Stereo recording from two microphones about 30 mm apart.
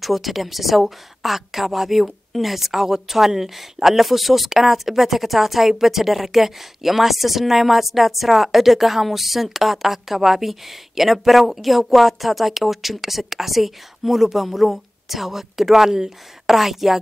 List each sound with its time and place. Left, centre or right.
0.0 s a woman's voice: centre